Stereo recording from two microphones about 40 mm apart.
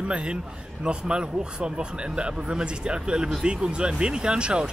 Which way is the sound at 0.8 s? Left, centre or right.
Right.